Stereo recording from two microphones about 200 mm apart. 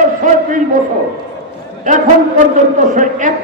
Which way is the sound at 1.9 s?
40° right (ahead or behind).